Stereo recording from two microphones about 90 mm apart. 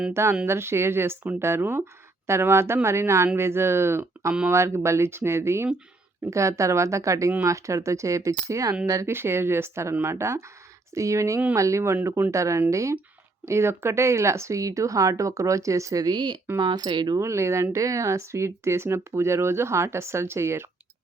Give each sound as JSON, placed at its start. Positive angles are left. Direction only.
{"t": 0.1, "sound": "speech", "side_deg": -30}
{"t": 17.2, "sound": "speech", "side_deg": -35}